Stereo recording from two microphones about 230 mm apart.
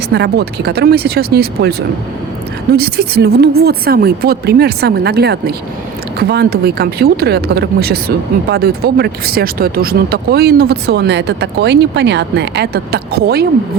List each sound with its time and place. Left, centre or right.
0.1 s speech: right
2.7 s speech: right